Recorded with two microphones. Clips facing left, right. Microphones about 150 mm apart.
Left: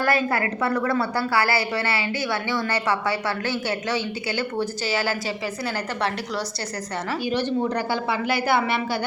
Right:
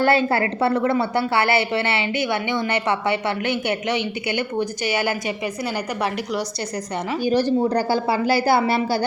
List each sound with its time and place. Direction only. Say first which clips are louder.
0.0 s a woman's voice: right 4 dB; 30° right (ahead or behind)
7.3 s a woman's voice: right 6 dB; 35° right (ahead or behind)